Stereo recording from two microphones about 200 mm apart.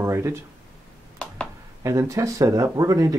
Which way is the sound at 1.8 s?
15° right (ahead or behind).